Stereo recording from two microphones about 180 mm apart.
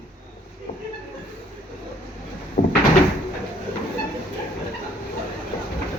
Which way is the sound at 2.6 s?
45° left (ahead or behind).